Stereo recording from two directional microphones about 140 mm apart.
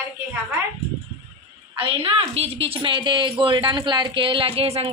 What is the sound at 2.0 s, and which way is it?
A woman's voice, 45° right (ahead or behind).